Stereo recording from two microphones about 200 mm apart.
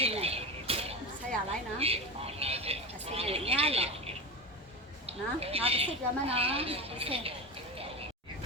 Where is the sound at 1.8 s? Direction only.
30° right (ahead or behind).